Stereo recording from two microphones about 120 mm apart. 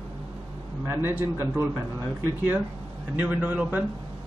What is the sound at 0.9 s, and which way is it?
Speech, 15° right (ahead or behind).